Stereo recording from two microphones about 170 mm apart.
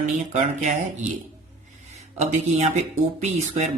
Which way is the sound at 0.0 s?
45° right (ahead or behind).